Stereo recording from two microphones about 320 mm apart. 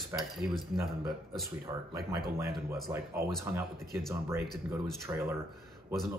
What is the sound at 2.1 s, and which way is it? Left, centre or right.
Speech, centre.